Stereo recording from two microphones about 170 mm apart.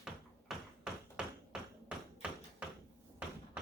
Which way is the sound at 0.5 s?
Centre (ahead or behind).